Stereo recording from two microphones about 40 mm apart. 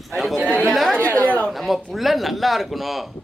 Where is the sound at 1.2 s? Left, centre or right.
Left.